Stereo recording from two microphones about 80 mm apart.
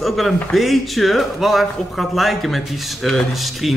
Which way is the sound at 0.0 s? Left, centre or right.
Centre.